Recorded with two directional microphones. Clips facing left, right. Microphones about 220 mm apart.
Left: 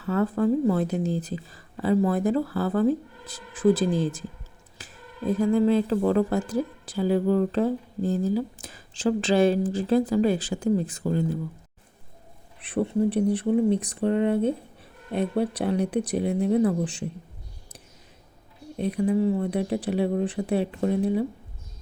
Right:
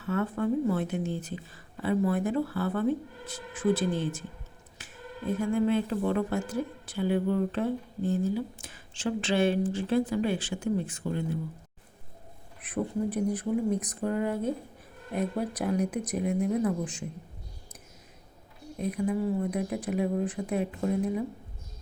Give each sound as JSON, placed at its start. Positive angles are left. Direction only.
{"t": 0.0, "sound": "speech", "side_deg": 35}
{"t": 12.9, "sound": "speech", "side_deg": 30}
{"t": 18.8, "sound": "speech", "side_deg": 30}